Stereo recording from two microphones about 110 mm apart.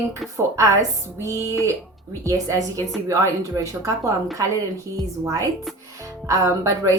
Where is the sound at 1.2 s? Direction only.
25° right (ahead or behind).